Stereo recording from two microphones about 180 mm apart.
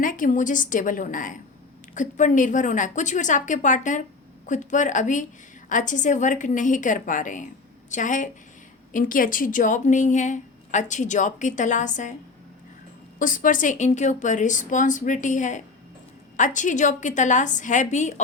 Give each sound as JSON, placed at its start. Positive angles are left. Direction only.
{"t": 0.0, "sound": "a woman's voice", "side_deg": 50}
{"t": 13.1, "sound": "a woman's voice", "side_deg": 50}